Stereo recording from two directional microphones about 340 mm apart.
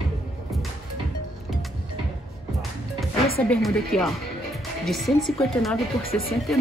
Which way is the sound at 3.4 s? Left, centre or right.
Centre.